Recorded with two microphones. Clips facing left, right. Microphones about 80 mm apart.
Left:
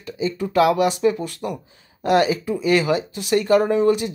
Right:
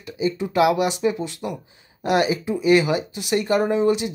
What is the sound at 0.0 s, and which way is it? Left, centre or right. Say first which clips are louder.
Speech: even; centre.